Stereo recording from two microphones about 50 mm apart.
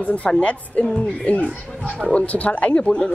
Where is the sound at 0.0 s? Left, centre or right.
Left.